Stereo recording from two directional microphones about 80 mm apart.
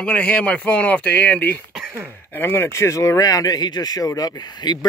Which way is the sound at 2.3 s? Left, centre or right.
Left.